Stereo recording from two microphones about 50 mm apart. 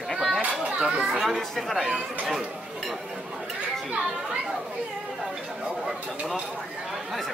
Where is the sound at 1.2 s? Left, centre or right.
Centre.